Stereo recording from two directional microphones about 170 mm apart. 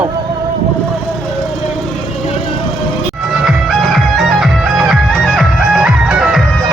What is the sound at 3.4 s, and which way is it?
Music, centre (ahead or behind).